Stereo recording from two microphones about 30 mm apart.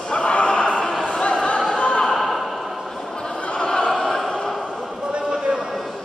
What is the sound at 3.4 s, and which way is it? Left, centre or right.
Opera, left.